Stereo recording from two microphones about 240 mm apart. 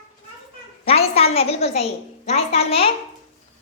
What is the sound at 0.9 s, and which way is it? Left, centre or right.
A child's voice, left.